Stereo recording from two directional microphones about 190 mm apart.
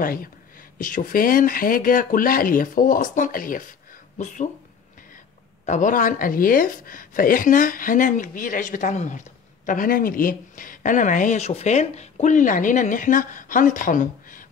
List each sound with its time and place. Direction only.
0.0 s speech: 50° left (ahead or behind)
5.7 s speech: 40° left (ahead or behind)